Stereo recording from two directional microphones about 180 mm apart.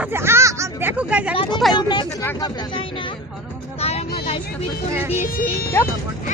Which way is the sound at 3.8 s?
35° left (ahead or behind).